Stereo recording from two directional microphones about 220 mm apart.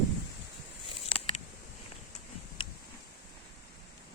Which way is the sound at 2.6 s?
20° left (ahead or behind).